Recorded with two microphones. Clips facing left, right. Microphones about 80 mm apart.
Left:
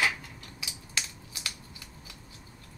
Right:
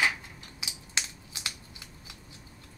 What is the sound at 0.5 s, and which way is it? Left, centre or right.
Finger snapping, right.